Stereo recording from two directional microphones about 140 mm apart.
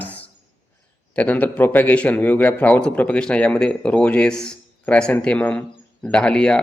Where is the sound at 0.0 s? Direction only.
10° left (ahead or behind).